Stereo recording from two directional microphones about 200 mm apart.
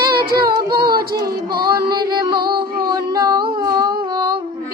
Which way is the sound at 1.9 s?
20° right (ahead or behind).